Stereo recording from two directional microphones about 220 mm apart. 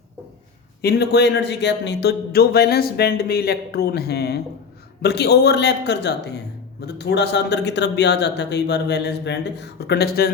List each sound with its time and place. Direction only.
0.8 s speech: 45° left (ahead or behind)